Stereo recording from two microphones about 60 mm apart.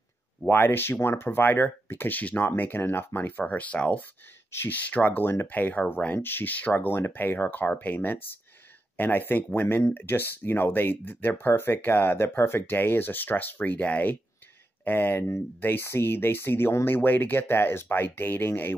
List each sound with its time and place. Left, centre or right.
0.5 s speech: left
3.4 s speech: left
4.5 s speech: left
4.7 s speech: left
6.7 s speech: left
14.9 s speech: left